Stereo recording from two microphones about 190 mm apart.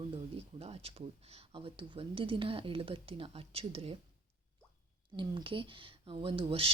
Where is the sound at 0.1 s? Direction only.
30° right (ahead or behind).